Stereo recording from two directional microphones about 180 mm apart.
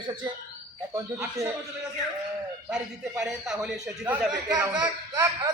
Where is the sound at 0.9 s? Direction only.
15° right (ahead or behind).